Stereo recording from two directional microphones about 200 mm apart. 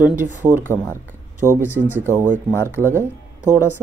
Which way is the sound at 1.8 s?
10° right (ahead or behind).